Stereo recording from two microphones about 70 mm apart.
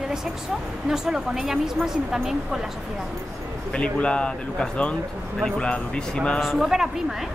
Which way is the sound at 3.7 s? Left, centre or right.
Centre.